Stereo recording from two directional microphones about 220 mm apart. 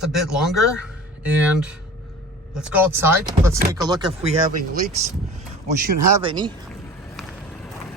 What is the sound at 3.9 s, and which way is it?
Speech, 30° right (ahead or behind).